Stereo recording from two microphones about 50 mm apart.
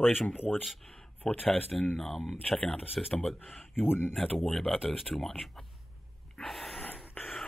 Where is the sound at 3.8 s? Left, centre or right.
Left.